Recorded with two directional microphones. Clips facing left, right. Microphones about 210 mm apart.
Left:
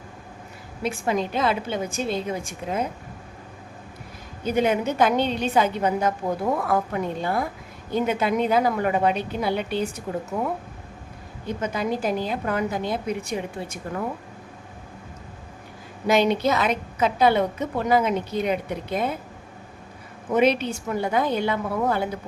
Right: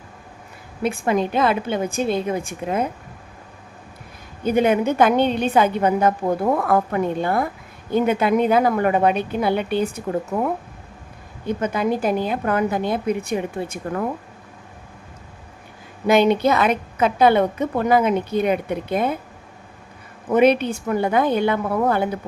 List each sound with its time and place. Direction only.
0.8 s a woman's voice: 55° right (ahead or behind)
4.4 s a woman's voice: 55° right (ahead or behind)
16.0 s a woman's voice: 55° right (ahead or behind)
20.3 s a woman's voice: 55° right (ahead or behind)